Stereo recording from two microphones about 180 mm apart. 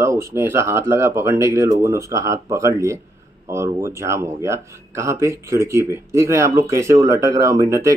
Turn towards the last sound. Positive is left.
turn(degrees=-15)  # may be behind; listen again after turning